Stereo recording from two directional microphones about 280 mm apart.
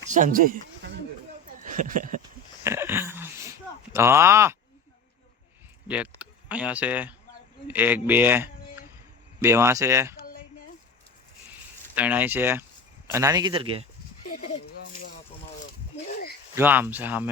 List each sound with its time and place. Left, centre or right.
0.1 s speech: right
1.6 s a sound: right
2.6 s a sound: centre
5.9 s speech: centre
11.9 s speech: centre
14.3 s speech: left
16.6 s speech: centre